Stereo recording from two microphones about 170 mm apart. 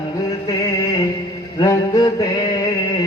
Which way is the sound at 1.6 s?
20° left (ahead or behind).